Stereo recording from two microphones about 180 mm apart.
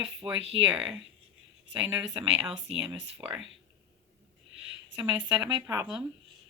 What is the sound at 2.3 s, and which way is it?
Speech, 5° right (ahead or behind).